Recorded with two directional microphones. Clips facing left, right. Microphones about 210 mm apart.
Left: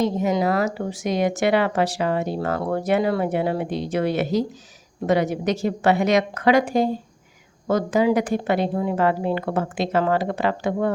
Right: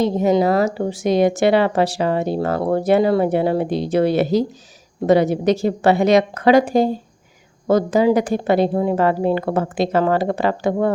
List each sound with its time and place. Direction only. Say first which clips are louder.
0.0 s speech: right 5 dB; 30° right (ahead or behind)